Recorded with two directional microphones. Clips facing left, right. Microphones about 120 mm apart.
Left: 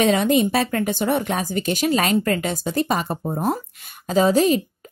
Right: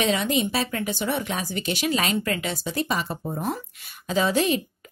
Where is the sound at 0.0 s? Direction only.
45° left (ahead or behind).